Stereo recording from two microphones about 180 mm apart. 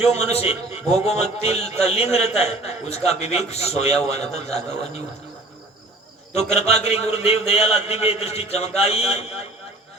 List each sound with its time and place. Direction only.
0.3 s a man's voice: 35° left (ahead or behind)
6.5 s a man's voice: 35° left (ahead or behind)